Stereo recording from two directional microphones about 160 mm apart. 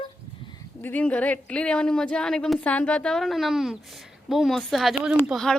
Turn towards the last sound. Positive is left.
turn(degrees=0)  # may be behind; listen again after turning